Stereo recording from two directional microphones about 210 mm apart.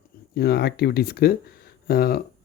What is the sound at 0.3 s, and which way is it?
Speech, 50° left (ahead or behind).